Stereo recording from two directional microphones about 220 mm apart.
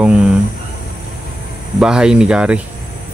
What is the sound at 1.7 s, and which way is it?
Speech, 5° right (ahead or behind).